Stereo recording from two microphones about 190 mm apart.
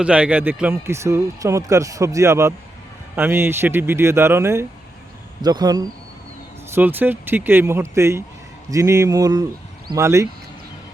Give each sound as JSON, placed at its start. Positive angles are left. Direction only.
{"t": 0.0, "sound": "a man's voice", "side_deg": -5}